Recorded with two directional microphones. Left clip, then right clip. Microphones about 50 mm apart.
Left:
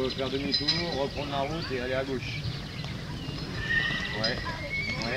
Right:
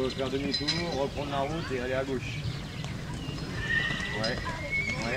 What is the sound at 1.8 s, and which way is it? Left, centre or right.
Speech, left.